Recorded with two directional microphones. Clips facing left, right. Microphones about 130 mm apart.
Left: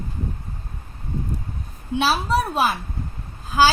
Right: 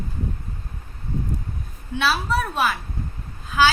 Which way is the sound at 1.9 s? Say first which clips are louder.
Left 2 dB; 35° left (ahead or behind).